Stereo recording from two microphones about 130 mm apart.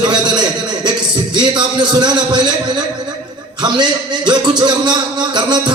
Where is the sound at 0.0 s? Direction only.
35° right (ahead or behind).